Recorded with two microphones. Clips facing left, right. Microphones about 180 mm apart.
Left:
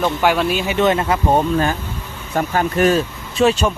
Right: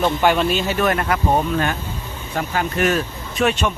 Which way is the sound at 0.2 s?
5° left (ahead or behind).